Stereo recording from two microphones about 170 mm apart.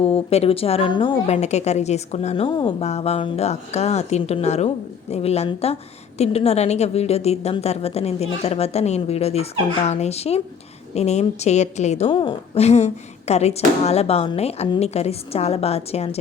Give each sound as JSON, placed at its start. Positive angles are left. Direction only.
{"t": 0.0, "sound": "a woman's voice", "side_deg": 35}
{"t": 2.8, "sound": "a woman's voice", "side_deg": 40}